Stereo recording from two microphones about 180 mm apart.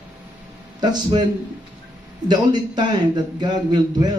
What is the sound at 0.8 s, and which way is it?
Speech, 25° right (ahead or behind).